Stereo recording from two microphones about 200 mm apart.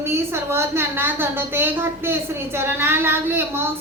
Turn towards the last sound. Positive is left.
turn(degrees=-10)  # may be behind; listen again after turning